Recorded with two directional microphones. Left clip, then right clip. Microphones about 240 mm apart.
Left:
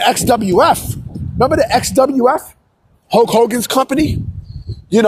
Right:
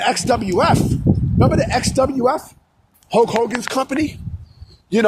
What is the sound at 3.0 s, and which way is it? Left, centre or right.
Speech, left.